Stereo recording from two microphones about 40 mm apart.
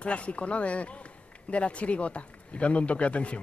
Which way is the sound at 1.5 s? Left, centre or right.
Left.